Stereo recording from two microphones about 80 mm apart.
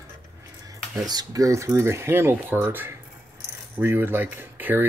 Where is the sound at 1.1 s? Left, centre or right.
Right.